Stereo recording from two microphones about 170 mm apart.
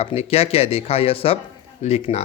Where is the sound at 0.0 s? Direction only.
35° left (ahead or behind).